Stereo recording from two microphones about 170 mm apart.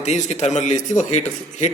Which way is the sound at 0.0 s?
45° left (ahead or behind).